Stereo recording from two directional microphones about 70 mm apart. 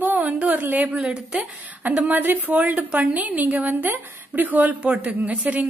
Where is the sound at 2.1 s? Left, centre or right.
Right.